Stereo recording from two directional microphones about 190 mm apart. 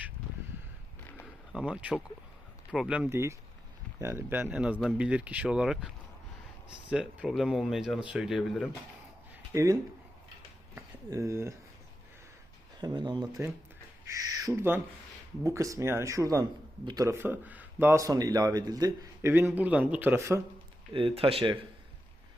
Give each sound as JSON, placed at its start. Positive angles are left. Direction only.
{"t": 1.5, "sound": "a man's voice", "side_deg": -5}
{"t": 6.9, "sound": "speech", "side_deg": -5}
{"t": 9.5, "sound": "speech", "side_deg": -15}
{"t": 10.8, "sound": "speech", "side_deg": -15}
{"t": 12.8, "sound": "a man's voice", "side_deg": -25}
{"t": 20.9, "sound": "speech", "side_deg": -30}